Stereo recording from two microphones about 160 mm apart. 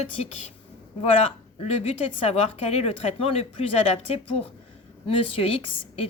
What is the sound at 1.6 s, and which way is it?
A woman's voice, 40° left (ahead or behind).